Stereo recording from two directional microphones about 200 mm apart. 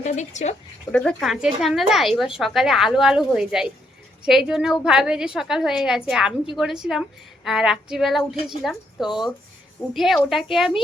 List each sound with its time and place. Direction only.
0.0 s speech: 35° left (ahead or behind)
0.9 s speech: 5° left (ahead or behind)